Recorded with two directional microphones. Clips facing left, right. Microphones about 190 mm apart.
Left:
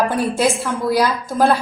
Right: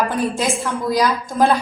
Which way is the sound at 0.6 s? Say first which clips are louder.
Left 1 dB; 10° left (ahead or behind).